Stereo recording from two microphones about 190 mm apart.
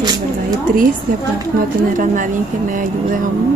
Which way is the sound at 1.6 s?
45° right (ahead or behind).